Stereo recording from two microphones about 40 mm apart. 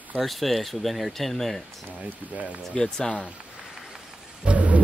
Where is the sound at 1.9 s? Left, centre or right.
Right.